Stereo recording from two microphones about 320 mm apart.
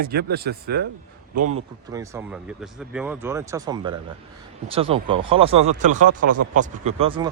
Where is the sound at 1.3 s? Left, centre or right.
Right.